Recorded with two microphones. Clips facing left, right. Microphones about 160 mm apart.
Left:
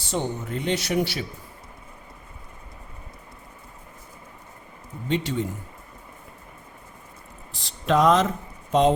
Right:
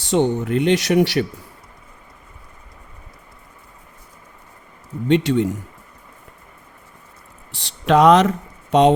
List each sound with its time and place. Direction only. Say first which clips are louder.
0.0 s speech: right 10 dB; 70° right (ahead or behind)
5.0 s speech: right 9 dB; 75° right (ahead or behind)
7.5 s speech: right 6 dB; 80° right